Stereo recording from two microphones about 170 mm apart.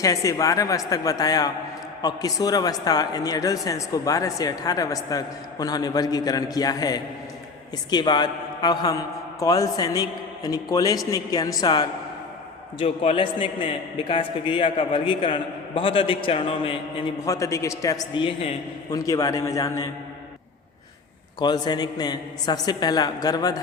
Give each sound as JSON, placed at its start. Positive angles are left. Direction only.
{"t": 0.0, "sound": "speech", "side_deg": 20}
{"t": 12.8, "sound": "a man's voice", "side_deg": 35}
{"t": 17.2, "sound": "speech", "side_deg": 20}
{"t": 18.1, "sound": "speech", "side_deg": 30}
{"t": 21.3, "sound": "speech", "side_deg": 25}